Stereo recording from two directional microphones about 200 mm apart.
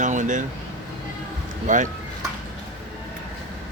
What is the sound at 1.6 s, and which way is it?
Speech, 40° right (ahead or behind).